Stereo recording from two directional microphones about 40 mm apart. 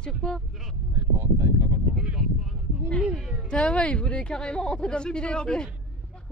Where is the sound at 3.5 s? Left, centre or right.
Left.